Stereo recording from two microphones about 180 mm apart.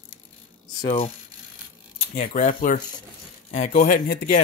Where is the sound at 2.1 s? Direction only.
45° left (ahead or behind).